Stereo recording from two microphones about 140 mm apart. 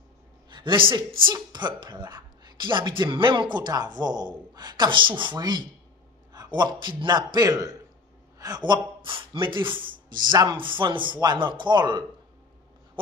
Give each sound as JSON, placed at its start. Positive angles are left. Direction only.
{"t": 0.5, "sound": "a woman's voice", "side_deg": -35}